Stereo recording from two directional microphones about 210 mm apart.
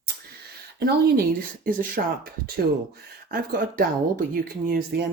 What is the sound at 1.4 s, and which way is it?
Speech, 45° right (ahead or behind).